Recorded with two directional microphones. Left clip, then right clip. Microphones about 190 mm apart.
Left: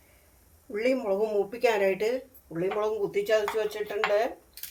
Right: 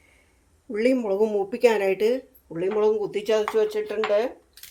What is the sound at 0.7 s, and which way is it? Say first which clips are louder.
Speech: right 4 dB; 60° right (ahead or behind).